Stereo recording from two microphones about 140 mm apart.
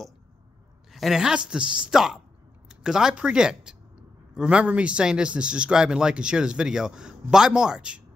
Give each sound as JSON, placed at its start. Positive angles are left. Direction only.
{"t": 0.9, "sound": "a woman's voice", "side_deg": 0}